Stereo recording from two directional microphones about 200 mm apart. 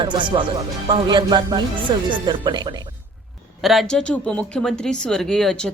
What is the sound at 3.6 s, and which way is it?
Speech, centre (ahead or behind).